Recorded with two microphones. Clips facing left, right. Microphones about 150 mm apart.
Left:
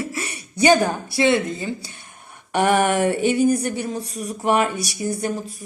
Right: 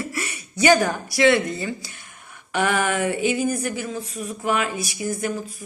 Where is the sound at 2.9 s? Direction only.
65° left (ahead or behind).